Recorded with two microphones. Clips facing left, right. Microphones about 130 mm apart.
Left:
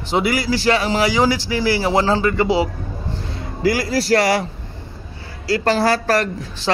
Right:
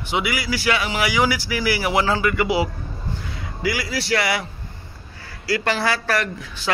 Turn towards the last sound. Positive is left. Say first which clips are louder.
# left 5 dB
turn(degrees=35)  # may be behind; listen again after turning